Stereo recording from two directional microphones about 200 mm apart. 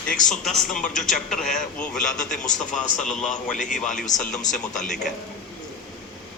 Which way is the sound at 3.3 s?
40° left (ahead or behind).